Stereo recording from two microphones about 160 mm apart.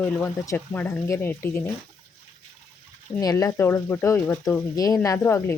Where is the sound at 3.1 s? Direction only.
20° left (ahead or behind).